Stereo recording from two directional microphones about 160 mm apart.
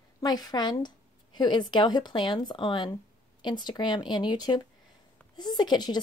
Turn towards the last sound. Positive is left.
turn(degrees=25)  # may be behind; listen again after turning